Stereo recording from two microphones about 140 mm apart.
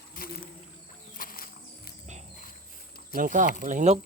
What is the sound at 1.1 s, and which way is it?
Music, 90° left.